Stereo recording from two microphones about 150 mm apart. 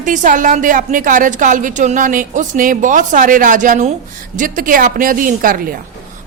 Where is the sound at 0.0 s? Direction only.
60° right (ahead or behind).